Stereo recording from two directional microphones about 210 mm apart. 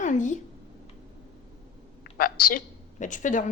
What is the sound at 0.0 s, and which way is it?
Speech, 35° left (ahead or behind).